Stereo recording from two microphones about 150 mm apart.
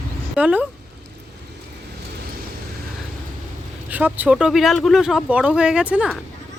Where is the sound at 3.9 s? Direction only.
10° right (ahead or behind).